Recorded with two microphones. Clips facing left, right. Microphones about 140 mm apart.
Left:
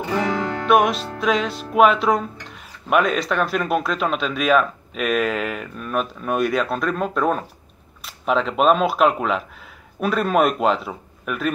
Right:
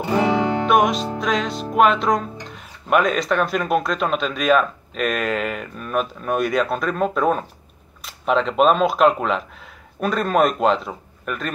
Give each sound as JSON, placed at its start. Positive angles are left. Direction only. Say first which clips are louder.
{"t": 0.4, "sound": "music", "louder": "right 5 dB", "side_deg": -20}
{"t": 0.7, "sound": "music", "louder": "left 2 dB", "side_deg": 0}
{"t": 1.1, "sound": "speech", "louder": "left 1 dB", "side_deg": 0}